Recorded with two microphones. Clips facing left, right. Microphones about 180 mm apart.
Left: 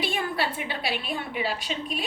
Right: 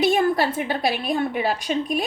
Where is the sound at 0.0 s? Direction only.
45° right (ahead or behind).